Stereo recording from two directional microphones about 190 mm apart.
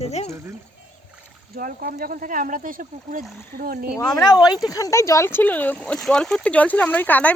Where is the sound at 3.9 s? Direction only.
20° left (ahead or behind).